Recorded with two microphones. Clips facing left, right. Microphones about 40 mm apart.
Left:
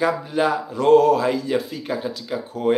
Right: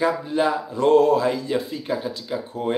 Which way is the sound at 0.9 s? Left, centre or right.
Left.